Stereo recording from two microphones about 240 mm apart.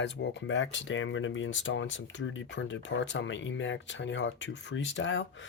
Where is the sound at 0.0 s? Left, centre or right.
Left.